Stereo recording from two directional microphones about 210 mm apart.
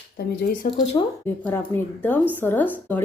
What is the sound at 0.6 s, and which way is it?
Speech, 40° left (ahead or behind).